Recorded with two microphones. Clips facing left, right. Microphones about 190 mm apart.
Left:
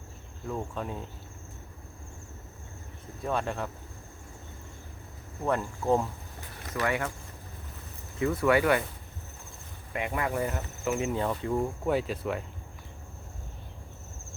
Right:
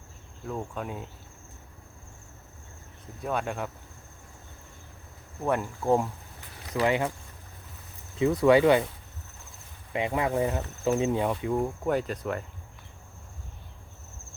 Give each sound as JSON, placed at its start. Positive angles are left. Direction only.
{"t": 0.4, "sound": "cricket", "side_deg": -5}
{"t": 3.2, "sound": "insect", "side_deg": -5}
{"t": 5.4, "sound": "insect", "side_deg": -10}
{"t": 6.7, "sound": "speech", "side_deg": -20}
{"t": 8.2, "sound": "speech", "side_deg": -15}
{"t": 9.9, "sound": "speech", "side_deg": -20}
{"t": 11.3, "sound": "insect", "side_deg": -5}
{"t": 11.9, "sound": "cricket", "side_deg": 5}